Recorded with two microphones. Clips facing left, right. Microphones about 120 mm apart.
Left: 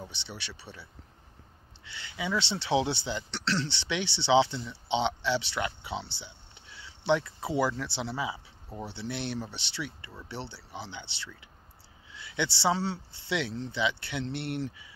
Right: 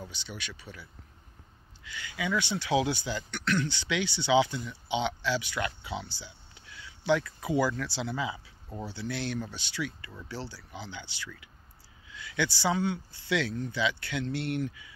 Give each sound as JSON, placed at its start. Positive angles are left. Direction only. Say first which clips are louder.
{"t": 0.0, "sound": "speech", "louder": "right 1 dB", "side_deg": 25}
{"t": 1.9, "sound": "speech", "louder": "right 1 dB", "side_deg": 25}